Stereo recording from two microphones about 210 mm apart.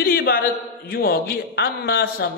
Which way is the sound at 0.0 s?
45° left (ahead or behind).